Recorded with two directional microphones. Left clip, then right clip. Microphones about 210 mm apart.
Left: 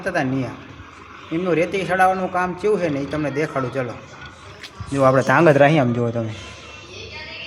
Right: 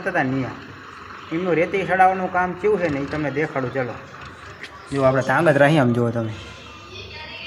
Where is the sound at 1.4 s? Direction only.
5° left (ahead or behind).